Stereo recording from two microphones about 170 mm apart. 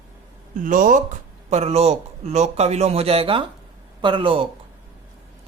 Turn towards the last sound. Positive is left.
turn(degrees=-30)  # may be behind; listen again after turning